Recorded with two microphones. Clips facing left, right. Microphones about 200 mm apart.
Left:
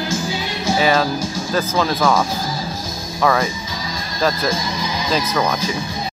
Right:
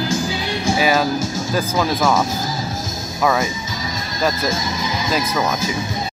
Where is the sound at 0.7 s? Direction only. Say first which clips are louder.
Left 1 dB; 10° right (ahead or behind).